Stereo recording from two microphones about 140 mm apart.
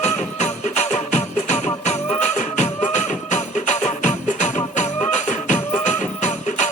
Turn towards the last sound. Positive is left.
turn(degrees=60)  # may be behind; listen again after turning